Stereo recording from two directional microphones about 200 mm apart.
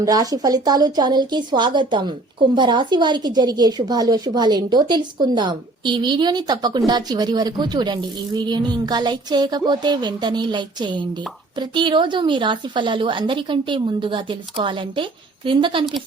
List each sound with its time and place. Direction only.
0.0 s a woman's voice: 20° right (ahead or behind)